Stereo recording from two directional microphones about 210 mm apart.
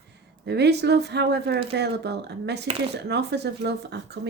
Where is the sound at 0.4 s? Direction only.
55° right (ahead or behind).